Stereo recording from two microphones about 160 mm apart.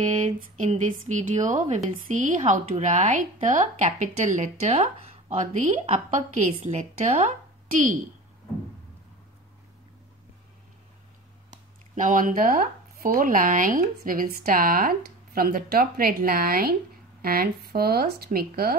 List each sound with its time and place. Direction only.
0.0 s a woman's voice: 45° right (ahead or behind)
11.9 s speech: 50° right (ahead or behind); by 18.8 s 70° right (ahead or behind)